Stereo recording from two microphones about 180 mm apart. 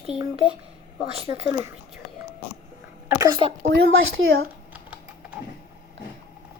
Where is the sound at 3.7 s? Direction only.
75° right (ahead or behind).